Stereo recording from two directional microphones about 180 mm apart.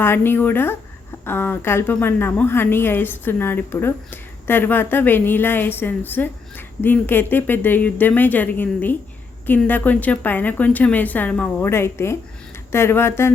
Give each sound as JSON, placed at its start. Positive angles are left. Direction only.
{"t": 0.0, "sound": "a woman's voice", "side_deg": 15}